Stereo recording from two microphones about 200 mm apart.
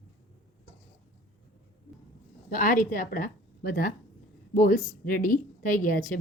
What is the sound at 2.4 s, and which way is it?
A woman's voice, 40° left (ahead or behind).